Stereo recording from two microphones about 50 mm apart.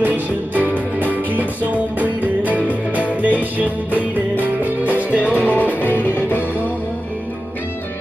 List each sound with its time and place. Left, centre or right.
0.0 s music: right
5.3 s music: left